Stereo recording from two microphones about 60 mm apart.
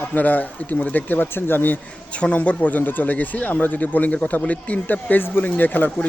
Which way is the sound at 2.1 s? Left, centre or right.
Left.